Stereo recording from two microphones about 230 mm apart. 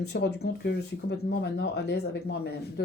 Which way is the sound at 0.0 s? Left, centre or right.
Left.